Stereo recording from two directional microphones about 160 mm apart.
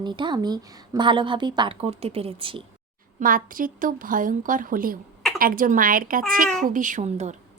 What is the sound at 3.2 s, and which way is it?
A woman's voice, 60° right (ahead or behind).